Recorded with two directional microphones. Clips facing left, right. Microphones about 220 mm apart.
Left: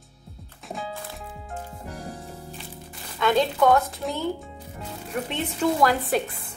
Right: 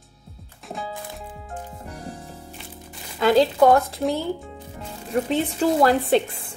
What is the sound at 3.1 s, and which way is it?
Speech, 35° right (ahead or behind).